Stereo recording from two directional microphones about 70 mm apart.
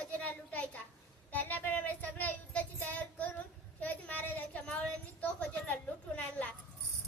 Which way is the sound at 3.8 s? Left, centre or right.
Left.